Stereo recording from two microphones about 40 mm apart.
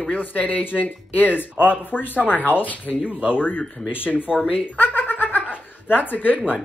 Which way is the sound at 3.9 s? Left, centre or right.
Left.